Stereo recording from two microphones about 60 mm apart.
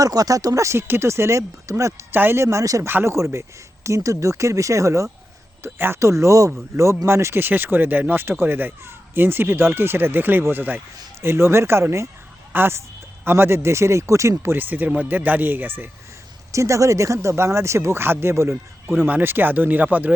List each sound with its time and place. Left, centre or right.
0.0 s speech: right
0.8 s speech: right
2.1 s speech: right
2.4 s speech: right
2.8 s speech: right
5.6 s speech: right
14.5 s speech: right
16.5 s speech: right
19.0 s speech: right